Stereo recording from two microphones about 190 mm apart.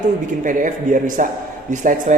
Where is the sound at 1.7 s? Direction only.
40° right (ahead or behind).